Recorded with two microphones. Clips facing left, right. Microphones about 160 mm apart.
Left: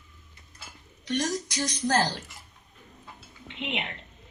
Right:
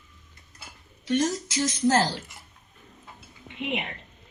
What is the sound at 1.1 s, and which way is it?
Speech, 5° right (ahead or behind).